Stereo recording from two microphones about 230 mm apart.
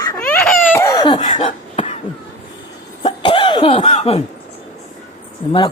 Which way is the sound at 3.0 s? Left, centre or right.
Left.